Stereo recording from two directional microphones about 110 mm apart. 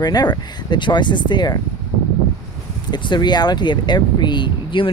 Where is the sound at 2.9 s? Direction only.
40° left (ahead or behind).